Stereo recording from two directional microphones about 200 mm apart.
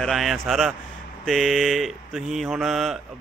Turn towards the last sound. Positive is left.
turn(degrees=0)  # may be behind; listen again after turning